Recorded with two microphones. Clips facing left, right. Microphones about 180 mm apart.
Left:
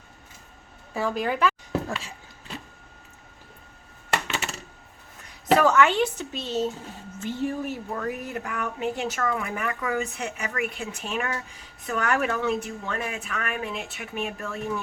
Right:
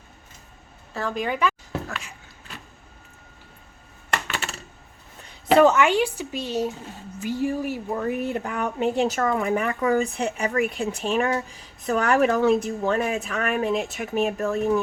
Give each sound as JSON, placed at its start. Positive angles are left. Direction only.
{"t": 0.9, "sound": "a woman's voice", "side_deg": 5}
{"t": 1.9, "sound": "speech", "side_deg": 30}
{"t": 5.5, "sound": "speech", "side_deg": -20}
{"t": 8.0, "sound": "speech", "side_deg": -25}